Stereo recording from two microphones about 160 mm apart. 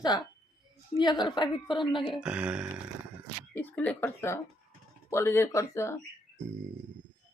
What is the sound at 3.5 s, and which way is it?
Speech, 10° left (ahead or behind).